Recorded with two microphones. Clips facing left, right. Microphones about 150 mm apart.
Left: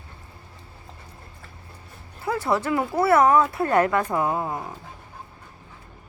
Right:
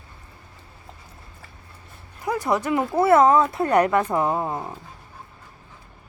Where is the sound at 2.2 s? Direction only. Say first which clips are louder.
Right 1 dB; 15° right (ahead or behind).